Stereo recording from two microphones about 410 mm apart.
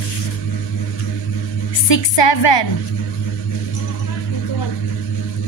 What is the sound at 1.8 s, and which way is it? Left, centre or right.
Speech, left.